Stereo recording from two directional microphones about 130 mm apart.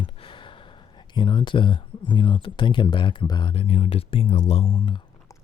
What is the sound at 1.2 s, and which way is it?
Speech, 40° left (ahead or behind).